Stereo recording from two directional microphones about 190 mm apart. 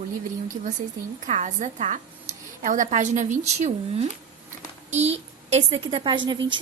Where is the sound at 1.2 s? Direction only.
40° right (ahead or behind).